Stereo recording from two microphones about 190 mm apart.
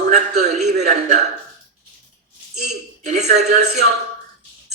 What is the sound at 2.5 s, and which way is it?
A man's voice, 40° right (ahead or behind).